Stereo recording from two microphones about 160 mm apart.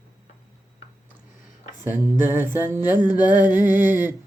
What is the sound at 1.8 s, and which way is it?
Mantra, 15° right (ahead or behind).